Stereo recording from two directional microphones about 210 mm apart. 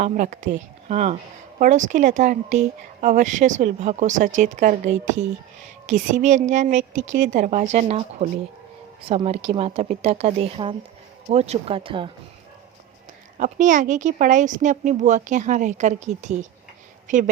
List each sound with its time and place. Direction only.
0.0 s a woman's voice: 35° right (ahead or behind)
13.4 s speech: 40° right (ahead or behind)